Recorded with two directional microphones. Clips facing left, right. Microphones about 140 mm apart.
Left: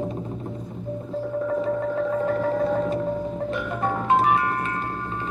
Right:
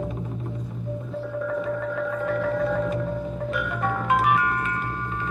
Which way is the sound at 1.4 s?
30° left (ahead or behind).